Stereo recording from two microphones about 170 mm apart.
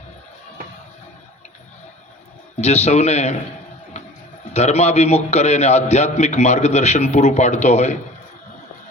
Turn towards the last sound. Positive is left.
turn(degrees=40)  # may be behind; listen again after turning